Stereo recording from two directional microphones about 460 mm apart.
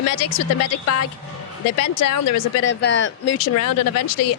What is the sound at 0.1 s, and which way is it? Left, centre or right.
Speech, left.